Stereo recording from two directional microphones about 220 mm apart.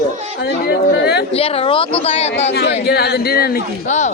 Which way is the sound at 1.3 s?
25° left (ahead or behind).